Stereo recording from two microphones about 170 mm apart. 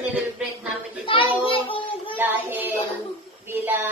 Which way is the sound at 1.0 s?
30° left (ahead or behind).